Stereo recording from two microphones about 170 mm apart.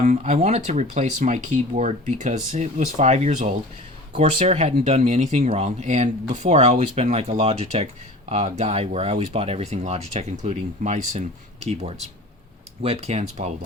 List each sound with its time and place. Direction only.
0.0 s speech: 45° right (ahead or behind)